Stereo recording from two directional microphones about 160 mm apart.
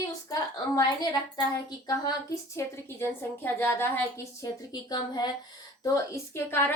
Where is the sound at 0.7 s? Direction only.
25° left (ahead or behind).